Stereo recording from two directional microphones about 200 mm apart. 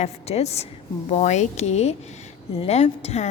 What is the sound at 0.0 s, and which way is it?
A woman's voice, 30° left (ahead or behind).